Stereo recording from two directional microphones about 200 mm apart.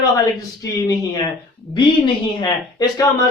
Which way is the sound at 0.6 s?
15° left (ahead or behind).